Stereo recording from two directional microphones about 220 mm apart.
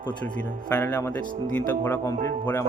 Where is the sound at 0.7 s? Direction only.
10° left (ahead or behind).